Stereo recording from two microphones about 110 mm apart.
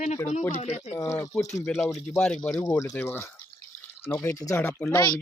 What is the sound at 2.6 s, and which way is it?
Speech, 35° left (ahead or behind).